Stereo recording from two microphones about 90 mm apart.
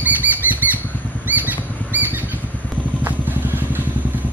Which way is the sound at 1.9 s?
20° right (ahead or behind).